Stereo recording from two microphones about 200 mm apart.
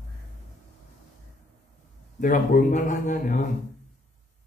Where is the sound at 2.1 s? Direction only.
40° left (ahead or behind).